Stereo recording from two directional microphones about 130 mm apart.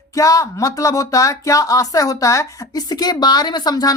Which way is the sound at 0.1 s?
25° left (ahead or behind).